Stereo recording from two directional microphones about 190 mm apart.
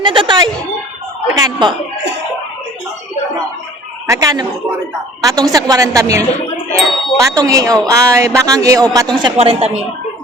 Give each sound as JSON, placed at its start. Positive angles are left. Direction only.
{"t": 0.0, "sound": "speech", "side_deg": -25}
{"t": 4.0, "sound": "a woman's voice", "side_deg": -15}
{"t": 6.7, "sound": "ding", "side_deg": 0}
{"t": 7.2, "sound": "speech", "side_deg": -15}
{"t": 9.1, "sound": "speech", "side_deg": -25}